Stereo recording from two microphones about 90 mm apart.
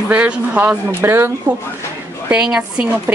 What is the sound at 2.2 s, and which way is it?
Speech, 10° right (ahead or behind).